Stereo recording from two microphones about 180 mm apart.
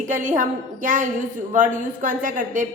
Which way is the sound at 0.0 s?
45° right (ahead or behind).